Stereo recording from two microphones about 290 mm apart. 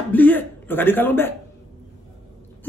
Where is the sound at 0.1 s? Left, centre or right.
Centre.